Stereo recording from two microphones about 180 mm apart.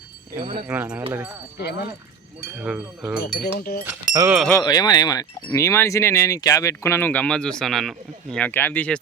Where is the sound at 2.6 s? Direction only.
10° right (ahead or behind).